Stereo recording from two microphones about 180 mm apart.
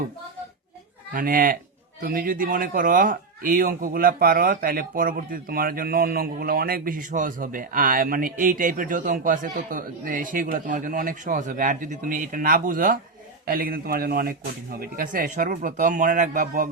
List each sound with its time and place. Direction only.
1.1 s speech: 55° right (ahead or behind)